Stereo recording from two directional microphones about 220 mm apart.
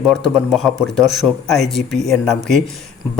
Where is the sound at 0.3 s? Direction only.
Centre (ahead or behind).